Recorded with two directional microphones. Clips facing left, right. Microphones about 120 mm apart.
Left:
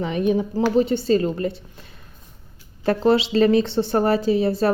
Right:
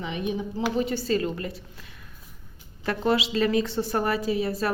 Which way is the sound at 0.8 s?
25° left (ahead or behind).